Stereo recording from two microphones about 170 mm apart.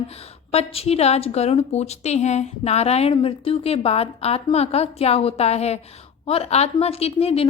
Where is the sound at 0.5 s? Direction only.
35° left (ahead or behind).